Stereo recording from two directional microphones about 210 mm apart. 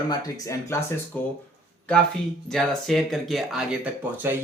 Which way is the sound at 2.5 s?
Centre (ahead or behind).